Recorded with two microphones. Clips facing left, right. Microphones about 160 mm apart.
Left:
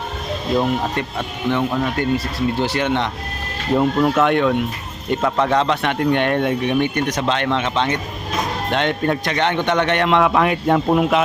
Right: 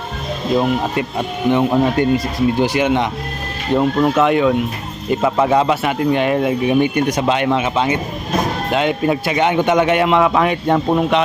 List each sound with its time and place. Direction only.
0.5 s speech: 10° right (ahead or behind)
1.7 s speech: 25° right (ahead or behind)
2.1 s speech: 15° right (ahead or behind)